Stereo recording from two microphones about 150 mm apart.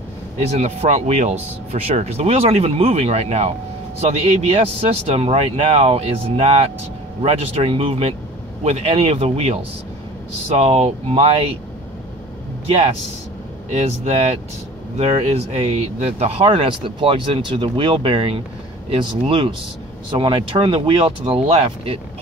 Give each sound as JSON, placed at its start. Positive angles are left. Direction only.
{"t": 0.5, "sound": "a man's voice", "side_deg": -45}
{"t": 12.6, "sound": "a man's voice", "side_deg": -45}